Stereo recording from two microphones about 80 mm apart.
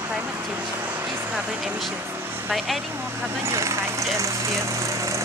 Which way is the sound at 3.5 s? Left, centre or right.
Right.